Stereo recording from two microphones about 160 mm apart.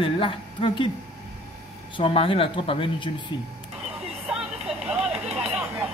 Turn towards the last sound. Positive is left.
turn(degrees=-10)  # may be behind; listen again after turning